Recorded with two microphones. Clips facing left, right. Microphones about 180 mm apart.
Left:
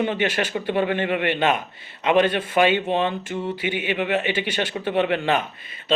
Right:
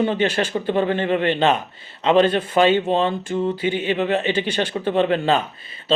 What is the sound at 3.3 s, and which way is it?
Speech, 40° right (ahead or behind).